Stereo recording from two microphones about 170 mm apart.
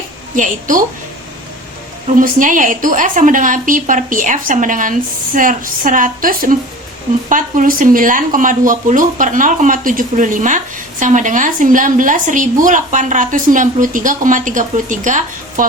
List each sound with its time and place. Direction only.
0.3 s a woman's voice: 50° right (ahead or behind)
2.0 s a woman's voice: 50° right (ahead or behind)